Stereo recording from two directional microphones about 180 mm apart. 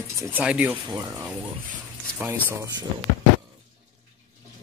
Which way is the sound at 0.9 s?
20° right (ahead or behind).